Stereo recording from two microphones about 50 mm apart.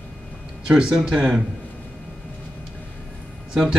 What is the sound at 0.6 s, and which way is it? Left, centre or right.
Speech, centre.